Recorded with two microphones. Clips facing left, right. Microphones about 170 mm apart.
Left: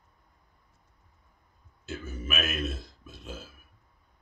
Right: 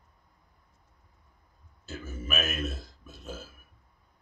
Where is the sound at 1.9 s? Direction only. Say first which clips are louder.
Even; 40° right (ahead or behind).